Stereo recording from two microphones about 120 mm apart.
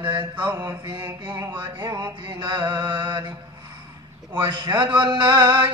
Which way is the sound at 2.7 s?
40° right (ahead or behind).